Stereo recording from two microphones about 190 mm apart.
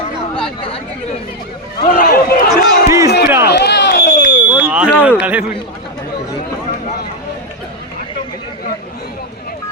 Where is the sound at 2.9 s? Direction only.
15° right (ahead or behind).